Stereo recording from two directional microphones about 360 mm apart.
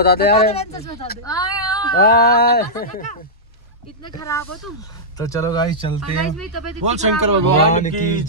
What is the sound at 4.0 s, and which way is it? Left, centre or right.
Speech, centre.